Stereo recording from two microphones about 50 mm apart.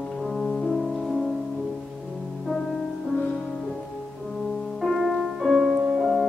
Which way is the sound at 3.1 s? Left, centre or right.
Left.